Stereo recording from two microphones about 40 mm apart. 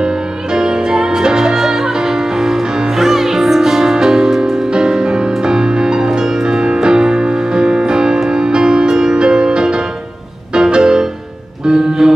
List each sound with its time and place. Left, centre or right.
0.0 s music: centre